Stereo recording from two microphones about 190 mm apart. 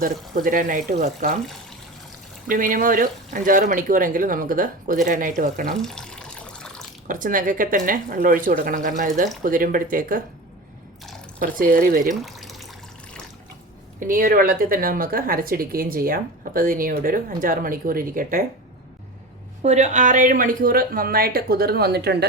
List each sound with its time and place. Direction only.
0.0 s a woman's voice: 50° right (ahead or behind)
2.5 s a woman's voice: 45° right (ahead or behind)
5.7 s water tap: 5° left (ahead or behind)
7.1 s a woman's voice: 45° right (ahead or behind)
11.3 s a woman's voice: 45° right (ahead or behind)
12.2 s water: centre (ahead or behind)
14.0 s a woman's voice: 45° right (ahead or behind)
19.6 s a woman's voice: 40° right (ahead or behind); by 22.3 s 60° right (ahead or behind)